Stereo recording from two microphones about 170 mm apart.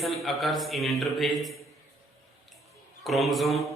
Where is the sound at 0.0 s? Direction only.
Centre (ahead or behind).